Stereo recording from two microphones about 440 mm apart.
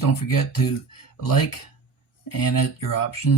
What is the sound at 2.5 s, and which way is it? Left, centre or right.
Speech, left.